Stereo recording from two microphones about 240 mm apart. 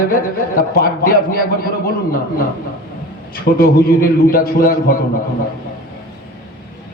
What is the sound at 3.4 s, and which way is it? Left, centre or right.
A man's voice, left.